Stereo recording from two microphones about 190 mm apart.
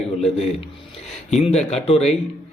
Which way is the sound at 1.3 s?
35° left (ahead or behind).